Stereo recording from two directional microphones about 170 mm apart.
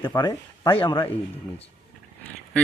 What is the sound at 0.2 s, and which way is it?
Speech, 25° left (ahead or behind).